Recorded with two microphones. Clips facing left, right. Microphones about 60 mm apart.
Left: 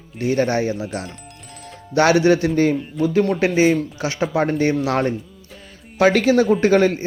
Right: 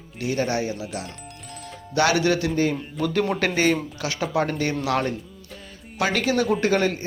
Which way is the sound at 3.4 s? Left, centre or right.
Centre.